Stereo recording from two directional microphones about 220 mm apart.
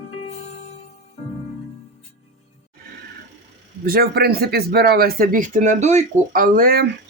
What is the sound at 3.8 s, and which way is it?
Speech, 45° right (ahead or behind).